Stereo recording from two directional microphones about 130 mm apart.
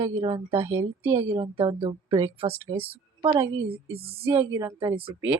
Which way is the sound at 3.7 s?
50° right (ahead or behind).